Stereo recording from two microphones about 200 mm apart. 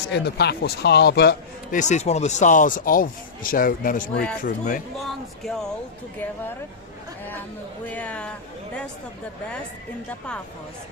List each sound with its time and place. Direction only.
0.1 s speech: 55° left (ahead or behind)
1.7 s speech: 35° left (ahead or behind)
4.9 s speech: centre (ahead or behind)
7.9 s speech: 5° left (ahead or behind)
10.1 s speech: 5° left (ahead or behind)